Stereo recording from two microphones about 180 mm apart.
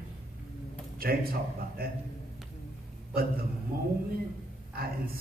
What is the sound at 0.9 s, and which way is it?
A man's voice, 55° right (ahead or behind).